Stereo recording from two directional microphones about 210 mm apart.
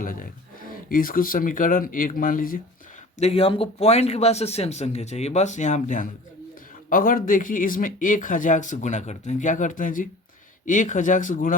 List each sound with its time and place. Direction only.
0.0 s speech: 40° left (ahead or behind)
3.2 s speech: 30° left (ahead or behind)